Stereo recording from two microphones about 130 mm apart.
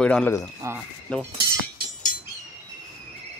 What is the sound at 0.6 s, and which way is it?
Speech, 25° right (ahead or behind).